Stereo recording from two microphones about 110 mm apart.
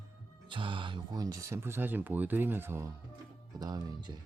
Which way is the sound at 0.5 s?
50° right (ahead or behind).